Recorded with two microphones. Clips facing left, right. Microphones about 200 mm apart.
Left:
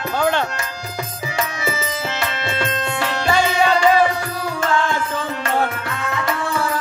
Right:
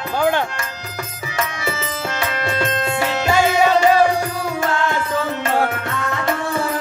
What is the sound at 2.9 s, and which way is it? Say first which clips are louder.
Music: right 1 dB; 10° right (ahead or behind).